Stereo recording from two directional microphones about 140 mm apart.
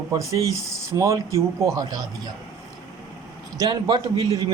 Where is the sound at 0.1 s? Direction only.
20° right (ahead or behind).